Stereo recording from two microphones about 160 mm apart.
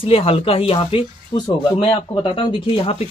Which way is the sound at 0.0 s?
35° left (ahead or behind).